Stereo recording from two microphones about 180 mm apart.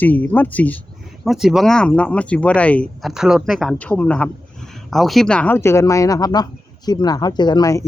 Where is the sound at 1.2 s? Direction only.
Centre (ahead or behind).